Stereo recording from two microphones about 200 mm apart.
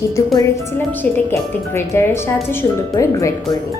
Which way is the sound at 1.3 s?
10° left (ahead or behind).